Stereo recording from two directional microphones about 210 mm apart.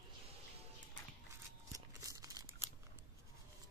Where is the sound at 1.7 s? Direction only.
15° right (ahead or behind).